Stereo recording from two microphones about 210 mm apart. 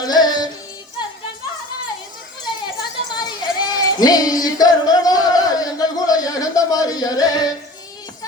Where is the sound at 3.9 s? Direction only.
20° left (ahead or behind).